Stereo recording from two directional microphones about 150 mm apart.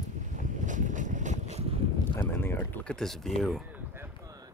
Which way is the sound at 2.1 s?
15° left (ahead or behind).